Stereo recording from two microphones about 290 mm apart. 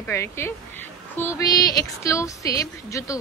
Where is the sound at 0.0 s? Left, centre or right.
Centre.